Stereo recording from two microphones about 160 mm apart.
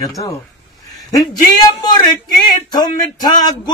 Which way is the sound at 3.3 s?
25° left (ahead or behind).